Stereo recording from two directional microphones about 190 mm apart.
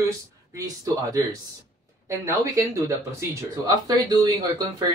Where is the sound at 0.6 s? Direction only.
20° right (ahead or behind).